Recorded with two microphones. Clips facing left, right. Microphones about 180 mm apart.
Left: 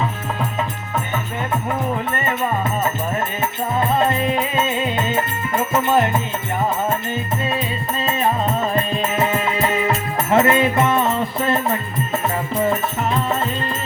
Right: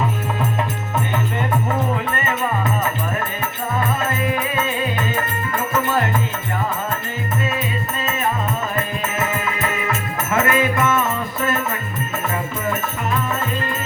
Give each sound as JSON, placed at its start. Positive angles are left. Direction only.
{"t": 2.8, "sound": "music", "side_deg": 25}
{"t": 8.7, "sound": "music", "side_deg": 30}